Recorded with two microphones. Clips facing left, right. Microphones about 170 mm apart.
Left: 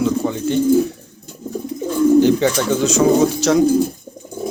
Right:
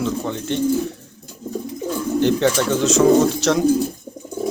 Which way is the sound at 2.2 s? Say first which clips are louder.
Left 3 dB; centre (ahead or behind).